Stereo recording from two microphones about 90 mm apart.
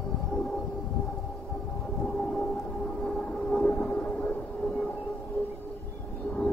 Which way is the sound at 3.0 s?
10° left (ahead or behind).